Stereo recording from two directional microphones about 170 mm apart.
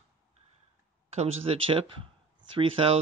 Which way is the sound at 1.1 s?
40° right (ahead or behind).